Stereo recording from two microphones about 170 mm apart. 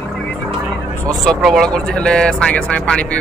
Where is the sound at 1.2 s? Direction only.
Centre (ahead or behind).